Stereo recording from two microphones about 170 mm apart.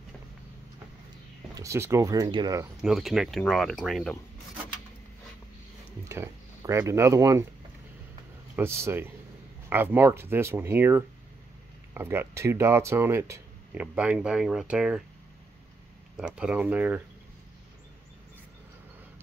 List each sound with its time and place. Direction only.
1.5 s speech: 15° right (ahead or behind)
2.8 s speech: centre (ahead or behind)
6.0 s speech: 15° right (ahead or behind)
8.5 s speech: 15° right (ahead or behind)
16.2 s speech: 5° right (ahead or behind)